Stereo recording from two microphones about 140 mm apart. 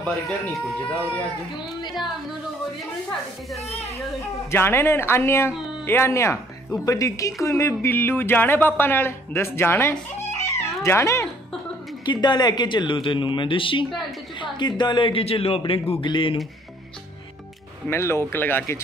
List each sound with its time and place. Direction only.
0.0 s speech: centre (ahead or behind)
3.4 s speech: centre (ahead or behind)
4.5 s speech: 15° left (ahead or behind)
12.0 s speech: 30° left (ahead or behind)
17.8 s speech: 20° left (ahead or behind)